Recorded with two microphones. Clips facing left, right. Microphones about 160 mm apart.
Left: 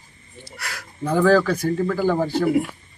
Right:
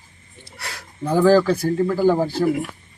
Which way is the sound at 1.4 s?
30° right (ahead or behind).